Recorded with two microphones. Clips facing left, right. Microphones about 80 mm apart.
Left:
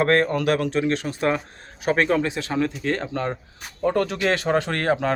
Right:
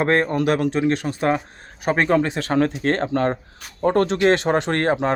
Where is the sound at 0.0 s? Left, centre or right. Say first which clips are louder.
Right 1 dB; right.